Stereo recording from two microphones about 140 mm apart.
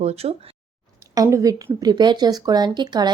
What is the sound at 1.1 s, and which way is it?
A woman's voice, 25° right (ahead or behind).